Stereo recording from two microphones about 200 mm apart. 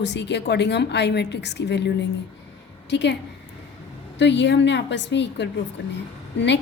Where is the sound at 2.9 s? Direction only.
60° left (ahead or behind).